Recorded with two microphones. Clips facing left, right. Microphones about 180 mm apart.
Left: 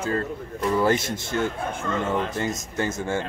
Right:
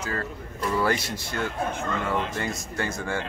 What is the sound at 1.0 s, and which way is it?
Speech, 45° left (ahead or behind).